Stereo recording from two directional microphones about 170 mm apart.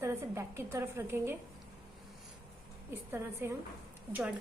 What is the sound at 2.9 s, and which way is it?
Speech, 15° right (ahead or behind).